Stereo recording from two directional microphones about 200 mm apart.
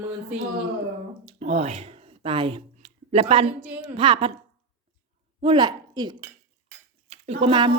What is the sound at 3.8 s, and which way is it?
Speech, 25° right (ahead or behind).